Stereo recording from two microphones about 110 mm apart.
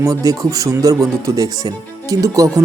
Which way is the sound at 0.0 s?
30° right (ahead or behind).